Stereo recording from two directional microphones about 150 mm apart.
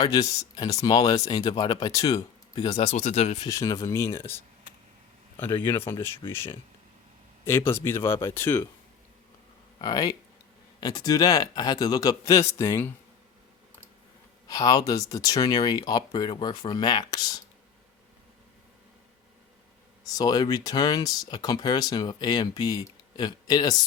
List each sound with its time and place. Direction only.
0.0 s speech: 25° left (ahead or behind)
2.7 s speech: 50° left (ahead or behind)
3.4 s speech: 20° left (ahead or behind)
5.4 s speech: 15° left (ahead or behind)
9.7 s speech: 25° left (ahead or behind)
14.4 s speech: 25° left (ahead or behind)
20.1 s speech: 25° left (ahead or behind)